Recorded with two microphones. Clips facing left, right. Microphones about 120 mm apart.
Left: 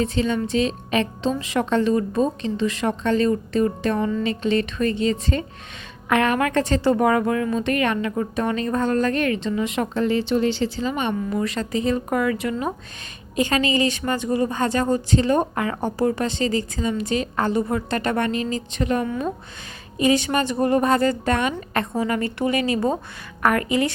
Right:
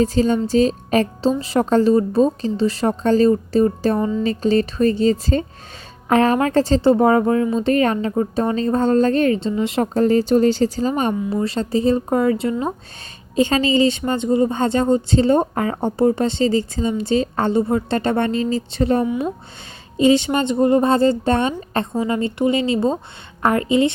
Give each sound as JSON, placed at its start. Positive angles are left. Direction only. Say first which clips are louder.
{"t": 0.0, "sound": "a woman's voice", "louder": "right 5 dB", "side_deg": -40}
{"t": 19.0, "sound": "speech", "louder": "right 4 dB", "side_deg": -15}
{"t": 20.0, "sound": "speech", "louder": "right 4 dB", "side_deg": -25}